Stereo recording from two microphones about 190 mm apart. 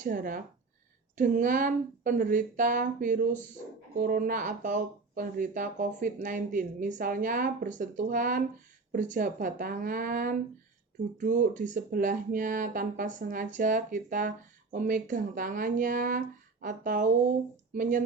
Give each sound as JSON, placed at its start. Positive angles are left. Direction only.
{"t": 0.0, "sound": "speech", "side_deg": -45}